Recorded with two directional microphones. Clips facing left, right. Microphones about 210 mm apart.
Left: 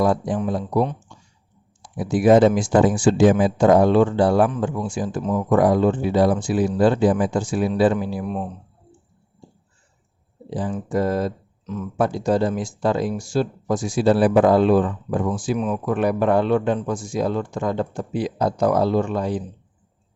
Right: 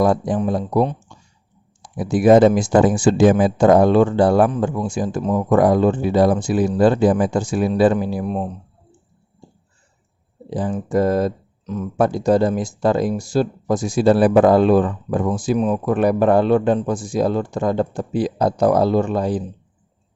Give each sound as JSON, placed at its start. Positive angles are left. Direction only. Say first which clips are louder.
{"t": 0.0, "sound": "speech", "louder": "right 3 dB", "side_deg": -45}
{"t": 2.0, "sound": "speech", "louder": "right 2 dB", "side_deg": -45}
{"t": 10.5, "sound": "speech", "louder": "right 3 dB", "side_deg": -45}